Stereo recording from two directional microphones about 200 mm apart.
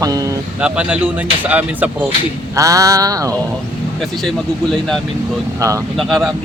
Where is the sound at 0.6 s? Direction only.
5° right (ahead or behind).